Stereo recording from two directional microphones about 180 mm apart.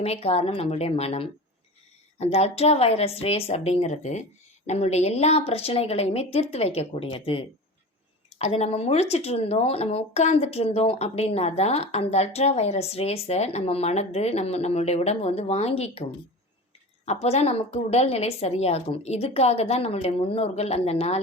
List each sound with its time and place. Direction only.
0.0 s speech: 35° left (ahead or behind)
17.1 s speech: 35° left (ahead or behind)